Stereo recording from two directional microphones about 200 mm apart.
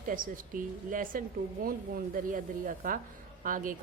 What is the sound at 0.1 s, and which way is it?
A woman's voice, 45° right (ahead or behind).